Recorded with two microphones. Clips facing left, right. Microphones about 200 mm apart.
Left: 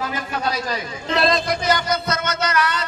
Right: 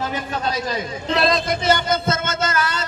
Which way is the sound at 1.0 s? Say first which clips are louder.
Even; centre (ahead or behind).